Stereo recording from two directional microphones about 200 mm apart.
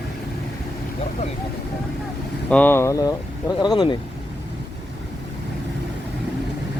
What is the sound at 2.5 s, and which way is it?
Speech, 10° left (ahead or behind).